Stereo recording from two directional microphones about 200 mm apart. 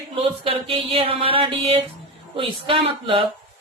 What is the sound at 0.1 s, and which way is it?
Speech, 25° right (ahead or behind).